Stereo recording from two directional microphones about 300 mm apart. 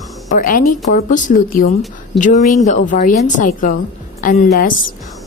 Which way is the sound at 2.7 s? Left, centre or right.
Left.